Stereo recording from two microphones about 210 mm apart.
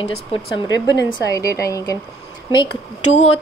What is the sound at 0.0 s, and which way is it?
A woman's voice, 25° left (ahead or behind).